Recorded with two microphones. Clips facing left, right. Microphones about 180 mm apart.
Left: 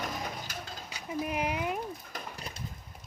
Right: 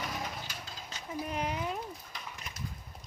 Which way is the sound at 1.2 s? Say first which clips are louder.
Left 3 dB; 10° left (ahead or behind).